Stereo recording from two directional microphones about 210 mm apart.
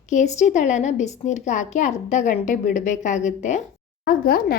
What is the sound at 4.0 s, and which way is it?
Speech, 45° left (ahead or behind).